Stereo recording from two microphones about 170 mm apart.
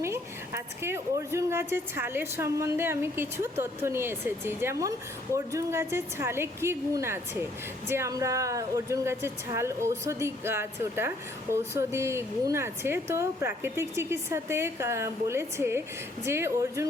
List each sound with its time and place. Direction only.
0.0 s a woman's voice: 15° right (ahead or behind)